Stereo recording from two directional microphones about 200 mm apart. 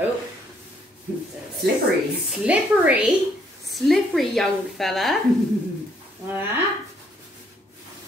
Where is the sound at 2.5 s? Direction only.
5° right (ahead or behind).